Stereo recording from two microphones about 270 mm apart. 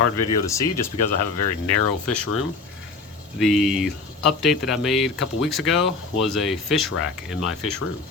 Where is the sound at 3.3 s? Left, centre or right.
Centre.